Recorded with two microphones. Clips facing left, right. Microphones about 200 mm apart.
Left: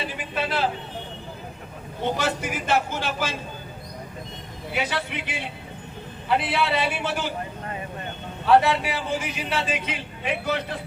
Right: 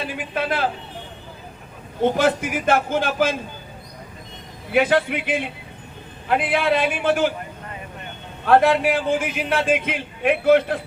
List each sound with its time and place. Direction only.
0.2 s a man's voice: 55° right (ahead or behind)
2.1 s a man's voice: 55° right (ahead or behind)
4.7 s a man's voice: 50° right (ahead or behind)
8.4 s a man's voice: 50° right (ahead or behind)